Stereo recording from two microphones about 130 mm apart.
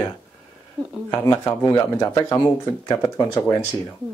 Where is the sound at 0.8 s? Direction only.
30° right (ahead or behind).